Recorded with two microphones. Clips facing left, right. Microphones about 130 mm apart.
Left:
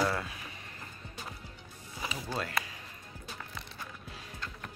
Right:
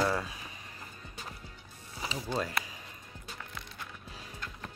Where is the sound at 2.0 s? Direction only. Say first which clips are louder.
Right 2 dB; 20° right (ahead or behind).